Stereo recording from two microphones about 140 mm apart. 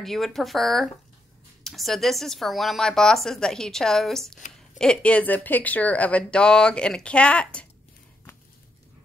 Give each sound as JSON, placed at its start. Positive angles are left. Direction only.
{"t": 0.0, "sound": "speech", "side_deg": 0}